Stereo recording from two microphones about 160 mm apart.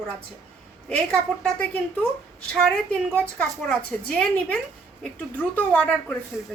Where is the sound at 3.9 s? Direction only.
5° left (ahead or behind).